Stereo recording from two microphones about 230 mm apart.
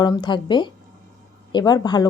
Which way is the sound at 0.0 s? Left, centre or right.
Centre.